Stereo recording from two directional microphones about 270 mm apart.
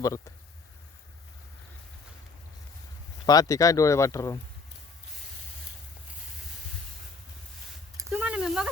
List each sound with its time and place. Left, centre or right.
0.0 s speech: centre
3.2 s speech: centre
7.9 s a sound: centre